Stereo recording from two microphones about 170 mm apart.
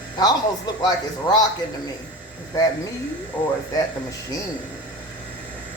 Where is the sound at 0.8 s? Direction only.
25° left (ahead or behind).